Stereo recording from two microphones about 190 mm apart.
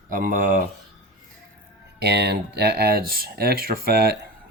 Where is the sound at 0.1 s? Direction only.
45° right (ahead or behind).